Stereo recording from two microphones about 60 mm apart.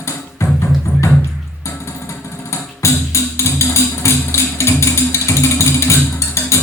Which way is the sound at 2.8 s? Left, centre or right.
Left.